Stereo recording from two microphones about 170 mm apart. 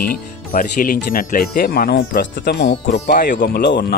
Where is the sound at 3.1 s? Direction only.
75° left (ahead or behind).